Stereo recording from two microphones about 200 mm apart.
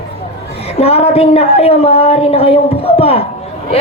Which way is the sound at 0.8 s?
30° left (ahead or behind).